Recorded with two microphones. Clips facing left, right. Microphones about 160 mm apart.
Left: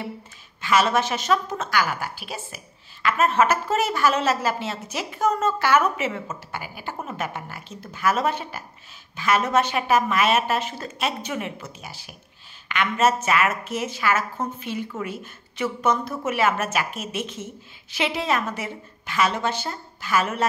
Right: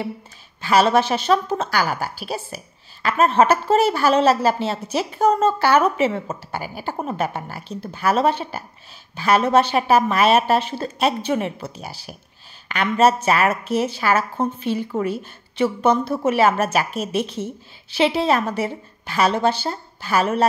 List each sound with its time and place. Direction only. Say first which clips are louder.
0.6 s a woman's voice: right 4 dB; 35° right (ahead or behind)